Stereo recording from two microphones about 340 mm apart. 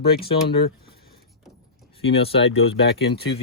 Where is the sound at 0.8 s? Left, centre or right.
Left.